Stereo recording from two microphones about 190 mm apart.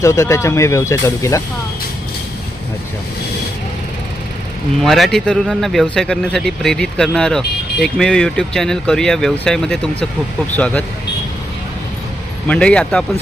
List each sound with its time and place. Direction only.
0.0 s speech: 15° left (ahead or behind)
4.8 s speech: centre (ahead or behind)
12.5 s speech: 5° left (ahead or behind)